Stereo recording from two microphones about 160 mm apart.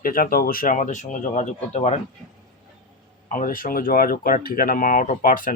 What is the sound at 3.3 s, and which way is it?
Speech, 60° left (ahead or behind).